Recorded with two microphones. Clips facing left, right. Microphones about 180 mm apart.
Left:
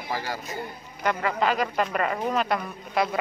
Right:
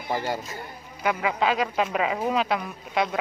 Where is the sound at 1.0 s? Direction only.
5° right (ahead or behind).